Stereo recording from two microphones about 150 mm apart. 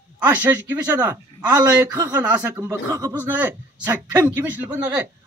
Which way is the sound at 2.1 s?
10° right (ahead or behind).